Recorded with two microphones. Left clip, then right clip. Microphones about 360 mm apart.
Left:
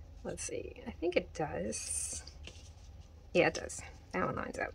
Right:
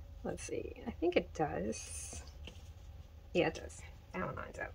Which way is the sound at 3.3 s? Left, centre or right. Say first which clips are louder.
Left 4 dB; centre.